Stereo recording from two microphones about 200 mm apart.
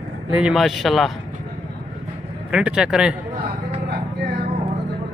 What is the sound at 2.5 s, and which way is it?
Speech, 5° right (ahead or behind).